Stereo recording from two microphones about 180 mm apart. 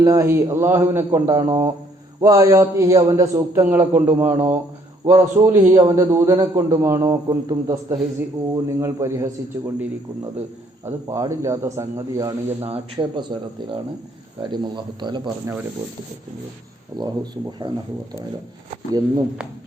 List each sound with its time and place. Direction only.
0.0 s a man's voice: 15° right (ahead or behind)
10.8 s a man's voice: 15° right (ahead or behind)
14.4 s speech: 25° right (ahead or behind)
17.6 s speech: 25° right (ahead or behind)